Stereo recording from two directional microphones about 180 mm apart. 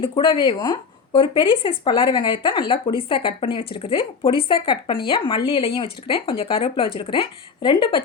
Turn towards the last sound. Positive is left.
turn(degrees=30)  # may be behind; listen again after turning